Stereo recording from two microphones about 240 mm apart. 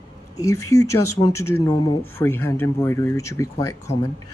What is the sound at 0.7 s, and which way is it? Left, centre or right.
Speech, centre.